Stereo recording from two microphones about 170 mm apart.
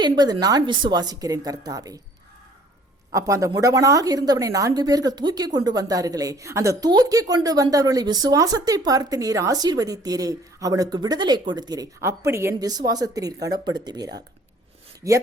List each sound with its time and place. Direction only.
0.0 s a woman's voice: 25° right (ahead or behind)
3.1 s a woman's voice: 20° right (ahead or behind)